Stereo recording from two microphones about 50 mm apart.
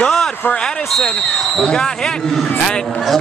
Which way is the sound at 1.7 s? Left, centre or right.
Centre.